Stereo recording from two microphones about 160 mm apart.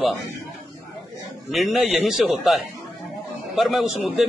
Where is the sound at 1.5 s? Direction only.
Centre (ahead or behind).